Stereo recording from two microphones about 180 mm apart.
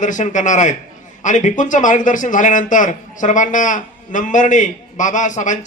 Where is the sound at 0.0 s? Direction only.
45° left (ahead or behind).